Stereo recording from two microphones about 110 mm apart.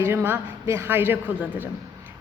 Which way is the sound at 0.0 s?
20° right (ahead or behind).